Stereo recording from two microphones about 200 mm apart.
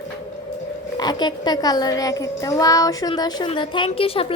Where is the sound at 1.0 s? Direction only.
20° left (ahead or behind).